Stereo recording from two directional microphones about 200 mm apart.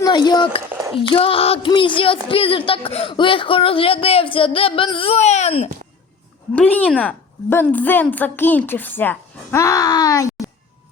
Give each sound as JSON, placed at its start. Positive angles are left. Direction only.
{"t": 0.0, "sound": "speech", "side_deg": 20}
{"t": 6.5, "sound": "a woman's voice", "side_deg": 5}